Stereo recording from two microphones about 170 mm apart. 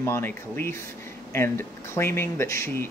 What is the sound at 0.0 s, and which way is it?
Speech, 15° left (ahead or behind).